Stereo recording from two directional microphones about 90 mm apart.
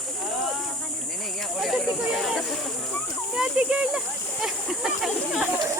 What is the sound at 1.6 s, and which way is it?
Snake, centre (ahead or behind).